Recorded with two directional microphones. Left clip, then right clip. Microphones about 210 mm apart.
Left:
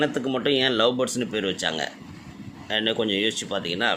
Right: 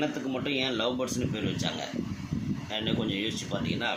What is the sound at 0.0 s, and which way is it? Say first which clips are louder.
Speech: left 7 dB; 40° left (ahead or behind).